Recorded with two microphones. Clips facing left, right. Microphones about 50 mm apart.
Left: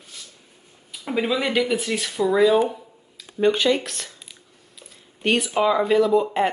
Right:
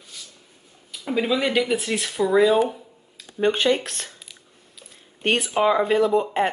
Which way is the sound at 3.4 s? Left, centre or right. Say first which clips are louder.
Left 1 dB; right.